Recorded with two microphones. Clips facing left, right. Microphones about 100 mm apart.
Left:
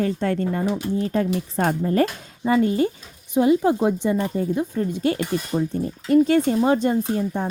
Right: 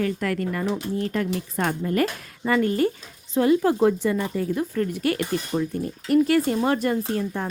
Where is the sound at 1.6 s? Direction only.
35° left (ahead or behind).